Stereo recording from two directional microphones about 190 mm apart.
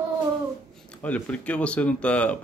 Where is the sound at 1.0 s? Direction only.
5° left (ahead or behind).